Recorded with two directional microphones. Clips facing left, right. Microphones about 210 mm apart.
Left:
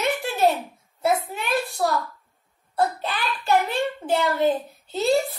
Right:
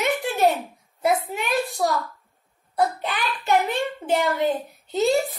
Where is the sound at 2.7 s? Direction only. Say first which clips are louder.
Right 1 dB; 15° right (ahead or behind).